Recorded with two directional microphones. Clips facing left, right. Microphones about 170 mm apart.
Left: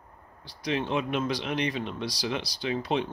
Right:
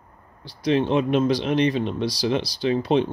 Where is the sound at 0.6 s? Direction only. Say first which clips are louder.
Right 8 dB; 30° right (ahead or behind).